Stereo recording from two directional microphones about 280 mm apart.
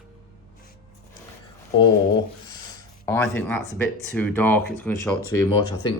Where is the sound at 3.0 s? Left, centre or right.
Centre.